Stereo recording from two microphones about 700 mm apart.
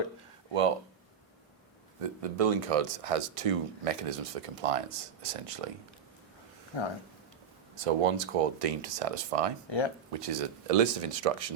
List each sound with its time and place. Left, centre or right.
2.0 s speech: right
6.7 s speech: left
7.8 s speech: right
9.6 s speech: left
10.1 s speech: right